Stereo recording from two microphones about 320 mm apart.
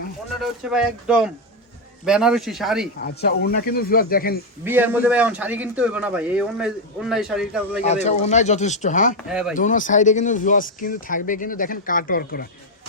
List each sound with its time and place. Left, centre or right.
0.6 s a man's voice: centre
3.0 s speech: left
4.6 s a man's voice: centre
7.8 s speech: left